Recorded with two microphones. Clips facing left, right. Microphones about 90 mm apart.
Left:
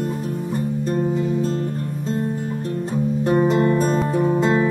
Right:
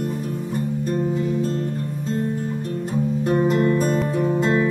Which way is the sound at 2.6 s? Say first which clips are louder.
Left 3 dB; 35° left (ahead or behind).